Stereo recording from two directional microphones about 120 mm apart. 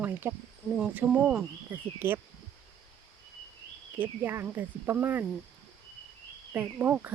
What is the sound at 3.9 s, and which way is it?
Speech, 15° right (ahead or behind).